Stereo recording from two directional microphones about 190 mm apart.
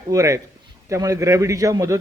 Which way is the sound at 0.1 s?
15° right (ahead or behind).